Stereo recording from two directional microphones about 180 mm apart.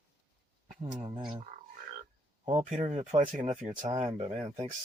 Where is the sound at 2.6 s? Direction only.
35° right (ahead or behind).